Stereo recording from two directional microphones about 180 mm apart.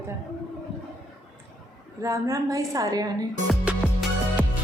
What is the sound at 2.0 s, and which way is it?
A woman's voice, 15° right (ahead or behind).